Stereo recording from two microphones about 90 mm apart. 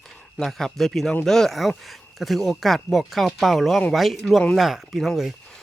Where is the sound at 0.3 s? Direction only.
5° left (ahead or behind).